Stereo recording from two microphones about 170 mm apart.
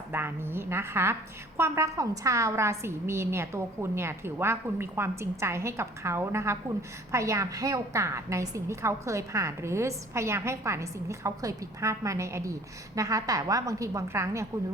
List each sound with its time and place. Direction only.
0.1 s a woman's voice: 15° right (ahead or behind)